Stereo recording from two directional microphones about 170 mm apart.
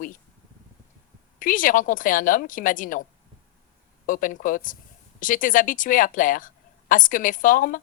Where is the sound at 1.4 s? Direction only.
50° left (ahead or behind).